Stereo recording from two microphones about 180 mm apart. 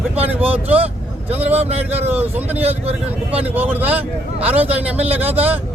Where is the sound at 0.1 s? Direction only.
10° right (ahead or behind).